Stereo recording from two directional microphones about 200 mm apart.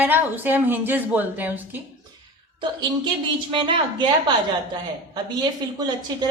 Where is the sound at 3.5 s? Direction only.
25° right (ahead or behind).